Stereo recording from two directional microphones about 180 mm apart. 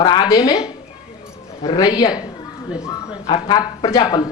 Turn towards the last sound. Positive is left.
turn(degrees=25)  # may be behind; listen again after turning